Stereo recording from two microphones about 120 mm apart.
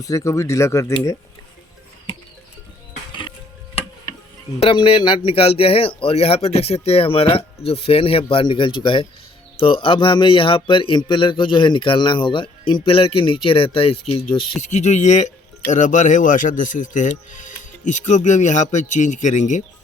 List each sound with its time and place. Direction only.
0.0 s speech: 25° left (ahead or behind)
4.6 s speech: 50° left (ahead or behind)
14.6 s speech: 75° left (ahead or behind)
15.7 s speech: 90° left